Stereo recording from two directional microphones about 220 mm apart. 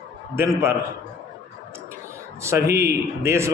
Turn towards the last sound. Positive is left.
turn(degrees=-10)  # may be behind; listen again after turning